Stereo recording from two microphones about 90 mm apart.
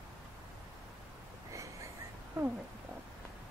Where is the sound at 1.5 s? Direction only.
35° right (ahead or behind).